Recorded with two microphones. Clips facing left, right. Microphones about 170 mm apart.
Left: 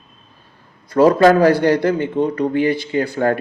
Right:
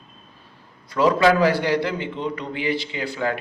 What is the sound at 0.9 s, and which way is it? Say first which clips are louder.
Speech: left 6 dB; 45° left (ahead or behind).